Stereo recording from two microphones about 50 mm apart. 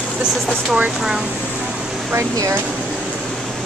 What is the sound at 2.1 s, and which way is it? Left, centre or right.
Speech, right.